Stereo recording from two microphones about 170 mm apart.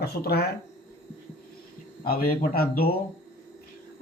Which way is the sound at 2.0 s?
60° left (ahead or behind).